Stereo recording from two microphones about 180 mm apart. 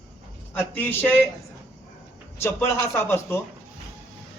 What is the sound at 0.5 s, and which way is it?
Speech, 10° left (ahead or behind).